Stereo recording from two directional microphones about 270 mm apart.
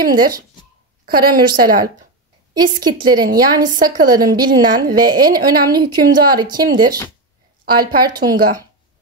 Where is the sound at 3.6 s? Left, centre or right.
Right.